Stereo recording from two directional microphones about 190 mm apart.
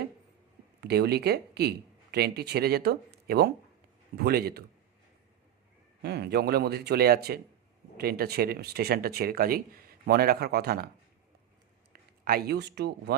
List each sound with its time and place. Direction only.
0.8 s speech: 60° right (ahead or behind)
6.0 s speech: 60° right (ahead or behind)
12.2 s speech: 50° right (ahead or behind)